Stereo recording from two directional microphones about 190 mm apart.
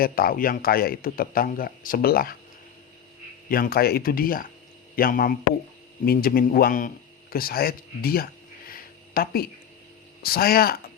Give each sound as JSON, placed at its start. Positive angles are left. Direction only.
{"t": 0.0, "sound": "speech", "side_deg": 50}
{"t": 3.5, "sound": "speech", "side_deg": 50}